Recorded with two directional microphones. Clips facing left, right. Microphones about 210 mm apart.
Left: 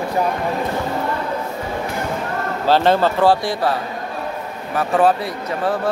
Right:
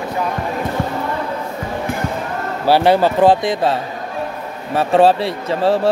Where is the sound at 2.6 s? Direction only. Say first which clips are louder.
Right 2 dB; 10° right (ahead or behind); by 5.9 s 30° right (ahead or behind).